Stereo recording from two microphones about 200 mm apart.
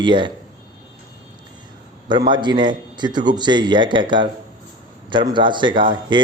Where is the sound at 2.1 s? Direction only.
25° right (ahead or behind).